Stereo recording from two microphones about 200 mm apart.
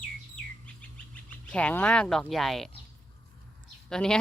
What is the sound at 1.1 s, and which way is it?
Speech, 5° left (ahead or behind).